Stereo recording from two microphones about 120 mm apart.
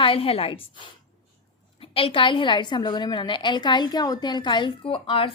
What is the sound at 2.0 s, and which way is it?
A woman's voice, 45° left (ahead or behind).